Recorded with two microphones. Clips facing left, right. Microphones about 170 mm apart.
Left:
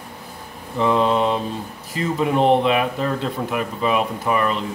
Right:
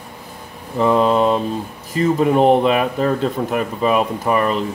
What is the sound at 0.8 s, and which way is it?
A man's voice, 40° right (ahead or behind).